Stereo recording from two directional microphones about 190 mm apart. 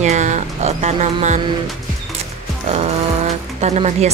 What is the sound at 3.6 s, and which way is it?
Speech, 35° right (ahead or behind).